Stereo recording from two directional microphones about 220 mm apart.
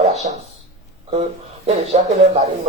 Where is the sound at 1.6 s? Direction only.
30° right (ahead or behind).